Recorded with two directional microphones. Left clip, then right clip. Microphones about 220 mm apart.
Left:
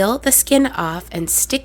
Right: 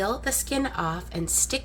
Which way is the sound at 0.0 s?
50° left (ahead or behind).